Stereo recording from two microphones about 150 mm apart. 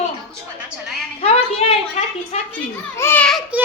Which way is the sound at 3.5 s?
10° right (ahead or behind).